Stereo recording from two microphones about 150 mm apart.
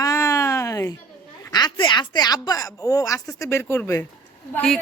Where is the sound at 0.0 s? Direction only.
20° left (ahead or behind).